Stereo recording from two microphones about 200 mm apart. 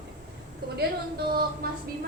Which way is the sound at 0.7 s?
50° right (ahead or behind).